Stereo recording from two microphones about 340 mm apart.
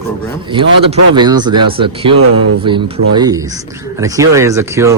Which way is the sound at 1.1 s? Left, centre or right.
Centre.